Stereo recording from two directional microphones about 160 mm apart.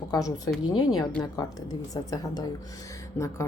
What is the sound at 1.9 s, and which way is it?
Speech, 20° left (ahead or behind).